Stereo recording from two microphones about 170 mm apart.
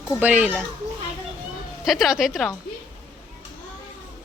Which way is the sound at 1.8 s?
Centre (ahead or behind).